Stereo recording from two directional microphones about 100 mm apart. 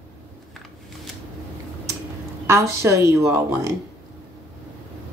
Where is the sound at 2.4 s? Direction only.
25° right (ahead or behind).